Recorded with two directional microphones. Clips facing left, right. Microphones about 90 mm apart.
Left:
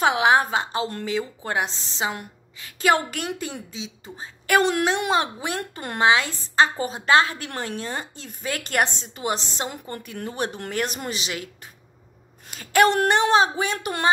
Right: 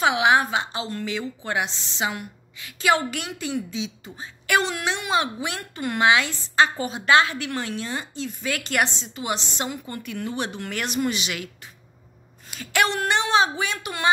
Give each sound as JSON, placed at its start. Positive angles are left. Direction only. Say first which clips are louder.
{"t": 0.0, "sound": "a woman's voice", "louder": "left 1 dB", "side_deg": 35}